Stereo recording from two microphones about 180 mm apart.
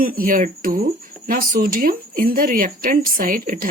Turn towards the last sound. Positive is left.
turn(degrees=-50)  # may be behind; listen again after turning